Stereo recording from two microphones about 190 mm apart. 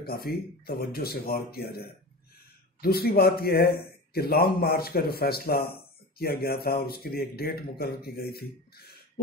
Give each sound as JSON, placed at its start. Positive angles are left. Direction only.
{"t": 0.0, "sound": "speech", "side_deg": 55}